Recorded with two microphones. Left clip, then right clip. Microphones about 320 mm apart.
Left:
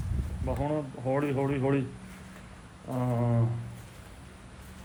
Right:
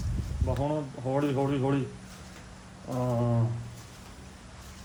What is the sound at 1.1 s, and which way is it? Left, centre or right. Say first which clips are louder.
Speech: right 1 dB; centre.